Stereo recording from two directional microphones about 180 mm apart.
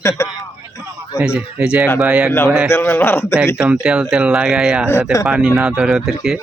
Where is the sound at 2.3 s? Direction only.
10° left (ahead or behind).